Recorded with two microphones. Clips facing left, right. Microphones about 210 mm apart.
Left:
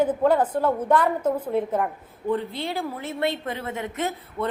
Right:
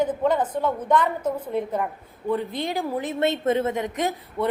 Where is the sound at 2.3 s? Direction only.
15° right (ahead or behind).